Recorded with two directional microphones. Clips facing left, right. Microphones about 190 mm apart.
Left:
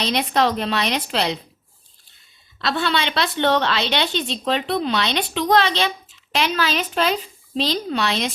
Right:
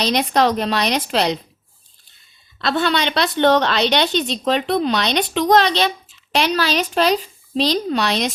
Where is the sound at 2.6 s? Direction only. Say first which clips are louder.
Right 3 dB; 50° right (ahead or behind).